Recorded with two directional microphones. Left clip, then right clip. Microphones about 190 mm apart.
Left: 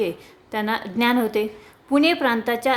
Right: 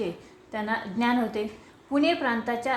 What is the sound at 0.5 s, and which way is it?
A woman's voice, 45° left (ahead or behind).